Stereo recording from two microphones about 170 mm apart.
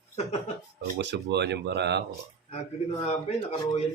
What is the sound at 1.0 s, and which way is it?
Speech, 85° right.